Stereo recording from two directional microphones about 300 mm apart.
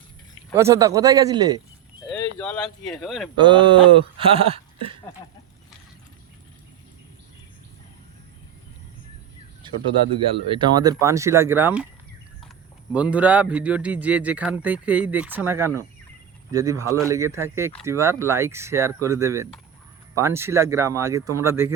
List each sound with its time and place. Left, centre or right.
0.5 s speech: centre
2.0 s speech: centre
3.3 s speech: centre
4.4 s a sound: centre
9.6 s bird: centre
10.5 s speech: centre
12.9 s a man's voice: centre